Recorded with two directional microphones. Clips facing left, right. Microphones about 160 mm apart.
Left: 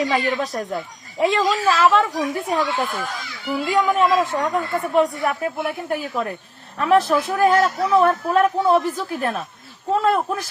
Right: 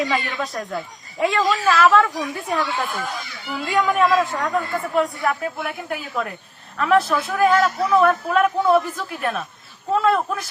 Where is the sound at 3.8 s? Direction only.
20° left (ahead or behind).